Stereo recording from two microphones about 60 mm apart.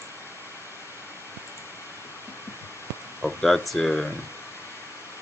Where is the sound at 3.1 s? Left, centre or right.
Centre.